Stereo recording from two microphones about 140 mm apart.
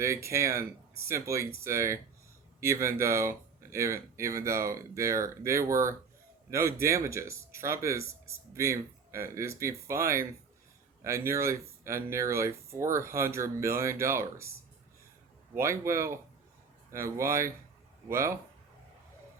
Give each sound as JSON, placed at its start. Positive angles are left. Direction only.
{"t": 0.0, "sound": "speech", "side_deg": -20}
{"t": 15.5, "sound": "speech", "side_deg": -20}